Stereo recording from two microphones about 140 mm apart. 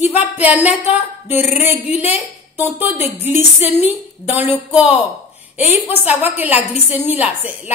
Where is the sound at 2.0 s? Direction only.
45° left (ahead or behind).